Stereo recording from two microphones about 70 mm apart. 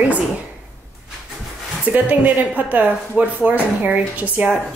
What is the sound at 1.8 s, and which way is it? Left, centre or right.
Speech, right.